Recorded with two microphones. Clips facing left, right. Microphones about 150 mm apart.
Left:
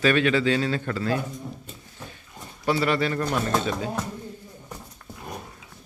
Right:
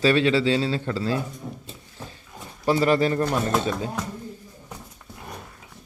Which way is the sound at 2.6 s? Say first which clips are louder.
Right 3 dB; 35° right (ahead or behind).